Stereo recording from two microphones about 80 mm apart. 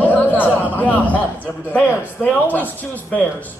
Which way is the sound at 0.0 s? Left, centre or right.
Left.